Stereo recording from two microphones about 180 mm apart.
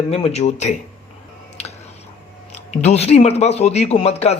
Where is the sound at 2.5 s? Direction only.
40° left (ahead or behind).